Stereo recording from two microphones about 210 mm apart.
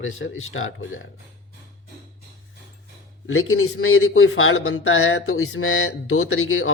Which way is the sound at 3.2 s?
80° left.